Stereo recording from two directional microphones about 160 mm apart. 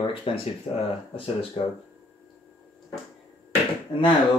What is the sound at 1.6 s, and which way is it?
Speech, 35° left (ahead or behind).